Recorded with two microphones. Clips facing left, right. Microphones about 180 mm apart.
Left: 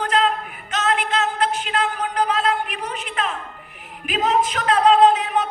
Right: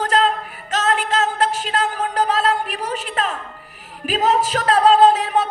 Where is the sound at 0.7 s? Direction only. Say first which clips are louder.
Right 2 dB; 40° right (ahead or behind).